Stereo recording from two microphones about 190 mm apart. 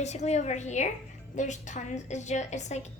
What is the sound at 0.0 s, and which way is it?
A woman's voice, 35° left (ahead or behind).